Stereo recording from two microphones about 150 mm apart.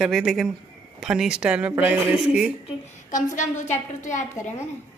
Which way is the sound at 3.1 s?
55° left (ahead or behind).